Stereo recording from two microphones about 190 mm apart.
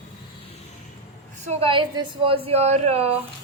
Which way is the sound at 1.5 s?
30° right (ahead or behind).